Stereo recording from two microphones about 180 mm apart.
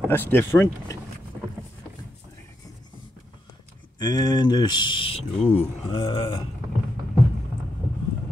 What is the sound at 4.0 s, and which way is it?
Speech, 20° left (ahead or behind).